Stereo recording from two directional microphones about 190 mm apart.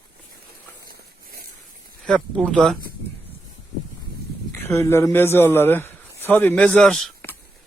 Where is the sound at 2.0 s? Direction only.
5° left (ahead or behind).